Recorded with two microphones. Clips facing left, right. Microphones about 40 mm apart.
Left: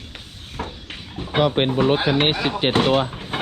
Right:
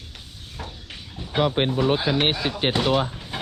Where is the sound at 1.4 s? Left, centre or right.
Left.